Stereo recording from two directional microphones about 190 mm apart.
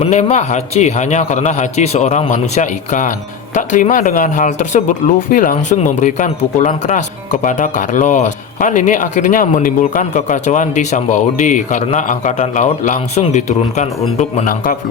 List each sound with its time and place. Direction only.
0.0 s speech: 35° left (ahead or behind)